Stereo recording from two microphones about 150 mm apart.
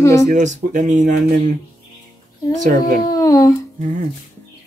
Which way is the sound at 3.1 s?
25° left (ahead or behind).